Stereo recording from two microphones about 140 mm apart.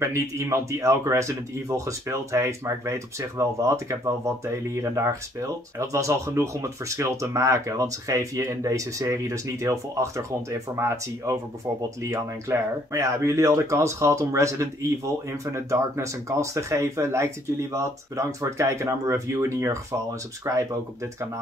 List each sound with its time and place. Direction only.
0.0 s speech: 20° right (ahead or behind)